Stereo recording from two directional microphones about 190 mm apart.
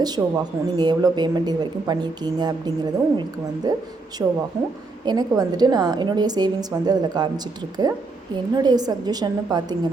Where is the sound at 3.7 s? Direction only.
20° right (ahead or behind).